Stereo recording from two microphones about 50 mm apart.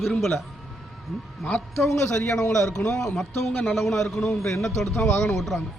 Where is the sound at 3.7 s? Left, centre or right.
Centre.